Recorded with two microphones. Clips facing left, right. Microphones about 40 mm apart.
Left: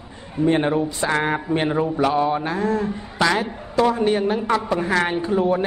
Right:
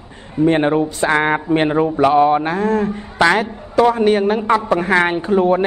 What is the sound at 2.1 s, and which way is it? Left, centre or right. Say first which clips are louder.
A man's voice: right 7 dB; right.